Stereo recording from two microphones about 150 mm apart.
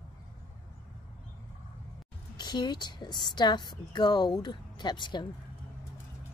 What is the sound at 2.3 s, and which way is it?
A woman's voice, 30° left (ahead or behind).